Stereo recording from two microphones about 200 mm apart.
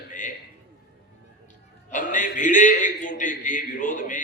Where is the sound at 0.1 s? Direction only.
40° left (ahead or behind).